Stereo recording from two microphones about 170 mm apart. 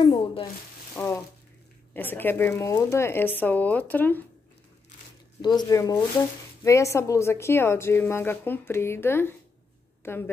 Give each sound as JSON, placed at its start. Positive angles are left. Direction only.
{"t": 0.0, "sound": "shuffling cards", "side_deg": 30}
{"t": 0.9, "sound": "a woman's voice", "side_deg": 15}
{"t": 5.4, "sound": "a woman's voice", "side_deg": 25}